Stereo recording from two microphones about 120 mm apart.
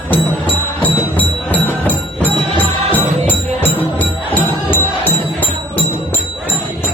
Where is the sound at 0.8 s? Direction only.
15° left (ahead or behind).